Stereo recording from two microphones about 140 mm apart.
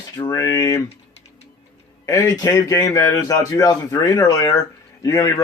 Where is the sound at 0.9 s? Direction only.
50° left (ahead or behind).